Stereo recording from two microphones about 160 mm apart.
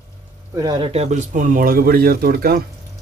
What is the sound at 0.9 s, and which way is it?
Speech, 40° right (ahead or behind).